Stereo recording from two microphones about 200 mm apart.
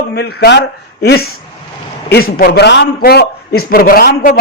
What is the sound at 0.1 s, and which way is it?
A man's voice, 55° left (ahead or behind).